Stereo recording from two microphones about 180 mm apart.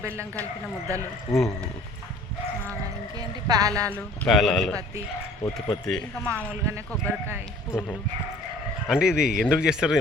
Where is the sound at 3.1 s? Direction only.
20° right (ahead or behind).